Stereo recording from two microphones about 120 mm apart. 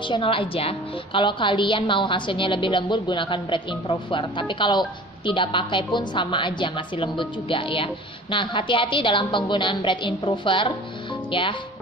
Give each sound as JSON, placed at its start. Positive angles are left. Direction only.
{"t": 0.1, "sound": "a woman's voice", "side_deg": 45}